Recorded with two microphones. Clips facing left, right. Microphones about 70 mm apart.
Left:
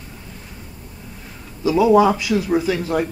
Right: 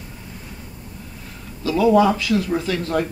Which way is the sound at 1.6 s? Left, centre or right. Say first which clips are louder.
Left 2 dB; centre.